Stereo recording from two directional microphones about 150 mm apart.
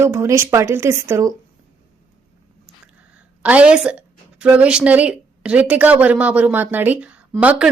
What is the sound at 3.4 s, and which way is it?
A woman's voice, 10° right (ahead or behind).